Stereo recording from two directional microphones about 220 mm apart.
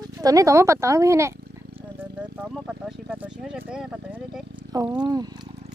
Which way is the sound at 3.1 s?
5° right (ahead or behind).